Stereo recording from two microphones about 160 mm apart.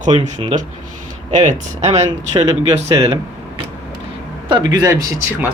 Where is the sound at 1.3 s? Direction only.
45° right (ahead or behind).